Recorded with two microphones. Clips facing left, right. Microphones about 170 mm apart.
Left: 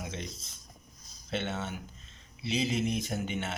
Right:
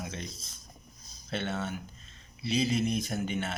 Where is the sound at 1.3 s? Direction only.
20° left (ahead or behind).